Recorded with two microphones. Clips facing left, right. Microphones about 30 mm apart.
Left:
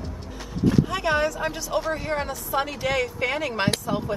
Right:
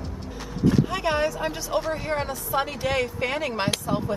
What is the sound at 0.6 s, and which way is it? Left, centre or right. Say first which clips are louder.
Speech: even; centre.